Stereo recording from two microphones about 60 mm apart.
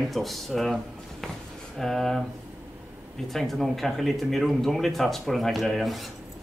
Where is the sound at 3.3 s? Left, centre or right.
Centre.